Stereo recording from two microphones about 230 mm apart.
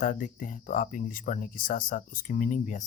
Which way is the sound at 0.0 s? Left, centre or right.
Left.